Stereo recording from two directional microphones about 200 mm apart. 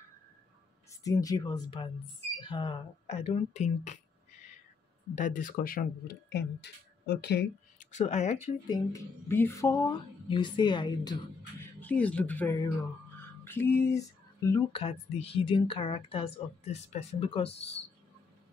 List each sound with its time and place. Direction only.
1.0 s speech: 15° left (ahead or behind); by 4.0 s 35° left (ahead or behind)
5.1 s speech: 40° left (ahead or behind); by 7.4 s 55° left (ahead or behind)
7.8 s speech: 35° left (ahead or behind)
8.6 s speech: 15° left (ahead or behind)
11.8 s speech: 5° left (ahead or behind)
13.4 s a sound: 10° left (ahead or behind)
14.5 s speech: 25° left (ahead or behind)